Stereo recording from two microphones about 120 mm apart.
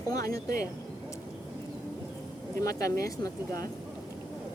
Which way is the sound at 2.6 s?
30° left (ahead or behind).